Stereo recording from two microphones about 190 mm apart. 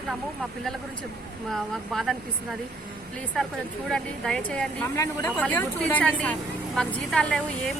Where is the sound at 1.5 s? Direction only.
Centre (ahead or behind).